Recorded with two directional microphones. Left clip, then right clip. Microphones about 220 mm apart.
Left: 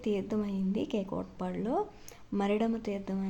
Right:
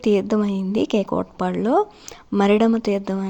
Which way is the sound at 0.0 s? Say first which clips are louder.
Right 14 dB; 30° right (ahead or behind).